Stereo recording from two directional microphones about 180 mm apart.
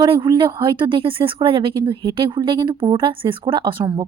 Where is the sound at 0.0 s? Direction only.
25° right (ahead or behind).